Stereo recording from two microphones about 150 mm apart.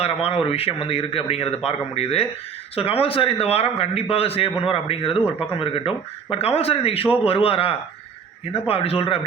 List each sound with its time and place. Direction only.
0.0 s a man's voice: 40° left (ahead or behind)